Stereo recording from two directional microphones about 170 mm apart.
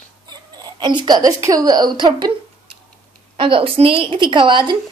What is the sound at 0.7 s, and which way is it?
A woman's voice, 25° right (ahead or behind).